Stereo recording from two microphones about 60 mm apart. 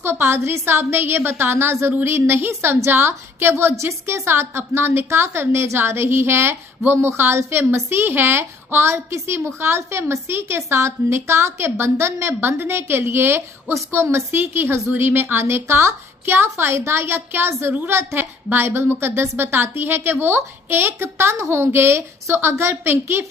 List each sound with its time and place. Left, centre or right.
0.0 s a woman's voice: right